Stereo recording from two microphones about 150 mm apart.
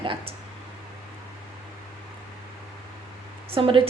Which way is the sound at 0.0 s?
35° right (ahead or behind).